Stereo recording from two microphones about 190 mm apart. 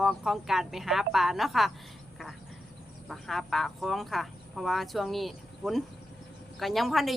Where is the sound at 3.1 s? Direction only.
Centre (ahead or behind).